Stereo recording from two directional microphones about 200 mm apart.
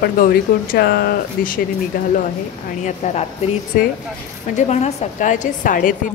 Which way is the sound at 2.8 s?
35° left (ahead or behind).